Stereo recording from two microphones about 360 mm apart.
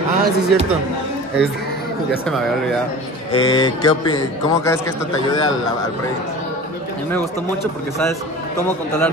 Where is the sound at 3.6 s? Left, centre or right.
Centre.